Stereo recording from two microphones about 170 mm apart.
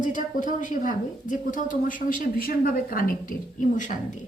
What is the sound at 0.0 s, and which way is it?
Speech, 50° left (ahead or behind).